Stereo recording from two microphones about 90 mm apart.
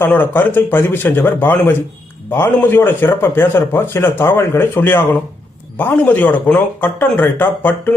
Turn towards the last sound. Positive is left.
turn(degrees=20)  # may be behind; listen again after turning